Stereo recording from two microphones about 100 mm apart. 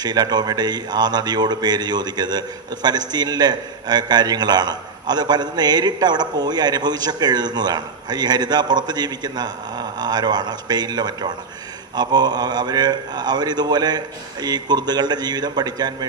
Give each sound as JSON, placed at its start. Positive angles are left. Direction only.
{"t": 0.0, "sound": "a man's voice", "side_deg": -45}